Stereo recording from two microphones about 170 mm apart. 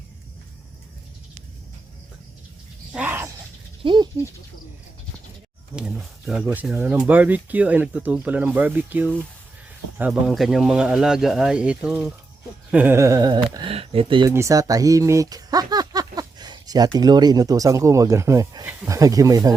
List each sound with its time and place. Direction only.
2.9 s speech: 10° right (ahead or behind)
3.8 s speech: 25° right (ahead or behind)
5.7 s speech: 5° right (ahead or behind); by 14.3 s 30° right (ahead or behind)
14.3 s speech: 20° right (ahead or behind)